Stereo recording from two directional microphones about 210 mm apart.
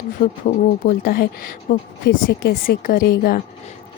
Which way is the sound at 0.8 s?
45° left (ahead or behind).